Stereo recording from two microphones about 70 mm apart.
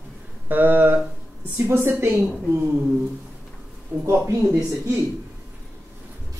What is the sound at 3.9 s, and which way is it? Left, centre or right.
Speech, right.